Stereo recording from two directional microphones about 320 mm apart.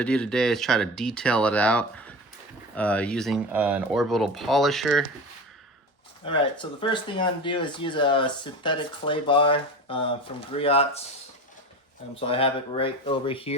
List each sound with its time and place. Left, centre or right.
0.0 s speech: centre
6.2 s speech: centre
12.1 s speech: centre